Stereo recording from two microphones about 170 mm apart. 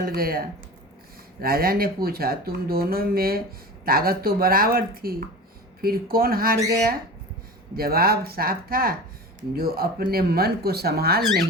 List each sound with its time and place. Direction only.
0.0 s speech: 60° right (ahead or behind)
7.8 s speech: 60° right (ahead or behind)